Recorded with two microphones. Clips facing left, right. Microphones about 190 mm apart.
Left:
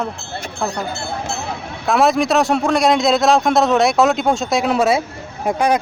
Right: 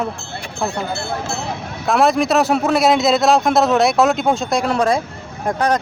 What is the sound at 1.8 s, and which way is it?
A man's voice, centre (ahead or behind).